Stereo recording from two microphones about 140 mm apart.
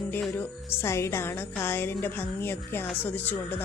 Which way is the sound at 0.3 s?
20° left (ahead or behind).